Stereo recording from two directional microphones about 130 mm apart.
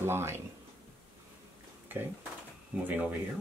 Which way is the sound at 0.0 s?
20° right (ahead or behind).